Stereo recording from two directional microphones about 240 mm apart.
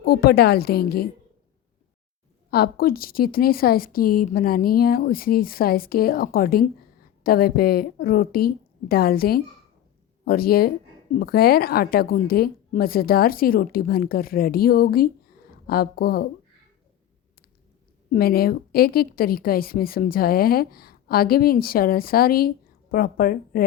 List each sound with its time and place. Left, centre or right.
0.0 s a woman's voice: left
2.5 s a woman's voice: left
18.1 s a woman's voice: left